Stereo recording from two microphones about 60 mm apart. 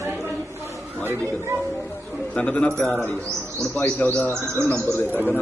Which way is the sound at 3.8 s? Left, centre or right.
Left.